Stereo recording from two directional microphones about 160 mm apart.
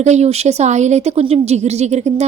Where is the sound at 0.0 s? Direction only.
45° right (ahead or behind).